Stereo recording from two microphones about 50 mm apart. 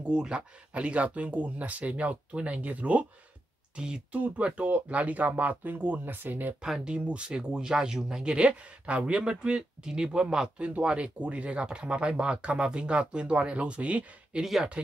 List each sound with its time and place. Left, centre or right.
0.0 s speech: centre; by 6.5 s right
6.6 s speech: centre
14.4 s speech: centre